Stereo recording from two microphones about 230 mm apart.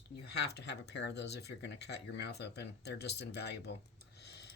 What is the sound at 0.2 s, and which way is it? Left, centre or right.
Speech, left.